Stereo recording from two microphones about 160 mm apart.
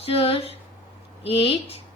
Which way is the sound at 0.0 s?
35° left (ahead or behind).